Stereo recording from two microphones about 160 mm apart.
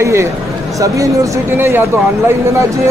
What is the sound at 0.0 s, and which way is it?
Speech, 15° right (ahead or behind).